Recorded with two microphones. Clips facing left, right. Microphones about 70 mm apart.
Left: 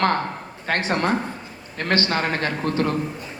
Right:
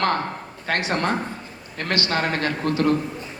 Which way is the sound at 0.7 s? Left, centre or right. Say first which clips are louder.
Left 1 dB; left.